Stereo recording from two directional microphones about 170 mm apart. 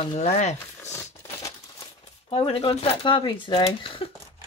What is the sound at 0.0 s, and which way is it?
Speech, 35° left (ahead or behind).